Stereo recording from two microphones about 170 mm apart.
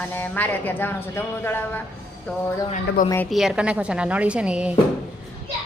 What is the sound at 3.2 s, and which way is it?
Speech, centre (ahead or behind).